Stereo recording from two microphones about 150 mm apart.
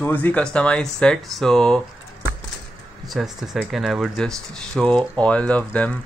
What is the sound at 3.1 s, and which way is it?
Speech, centre (ahead or behind).